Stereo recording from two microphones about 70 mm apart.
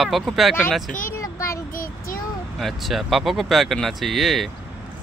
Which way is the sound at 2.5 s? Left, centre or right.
Centre.